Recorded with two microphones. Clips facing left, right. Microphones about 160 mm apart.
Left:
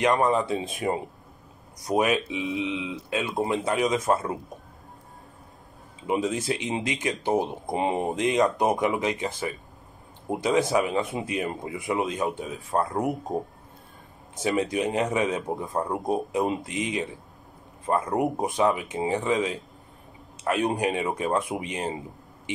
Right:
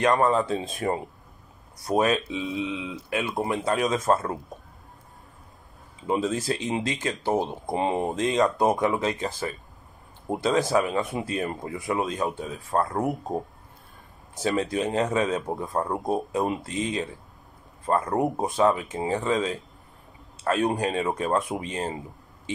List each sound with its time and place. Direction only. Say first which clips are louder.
0.0 s speech: right 1 dB; 20° left (ahead or behind)
6.0 s speech: even; 15° left (ahead or behind)
14.3 s speech: even; 20° left (ahead or behind)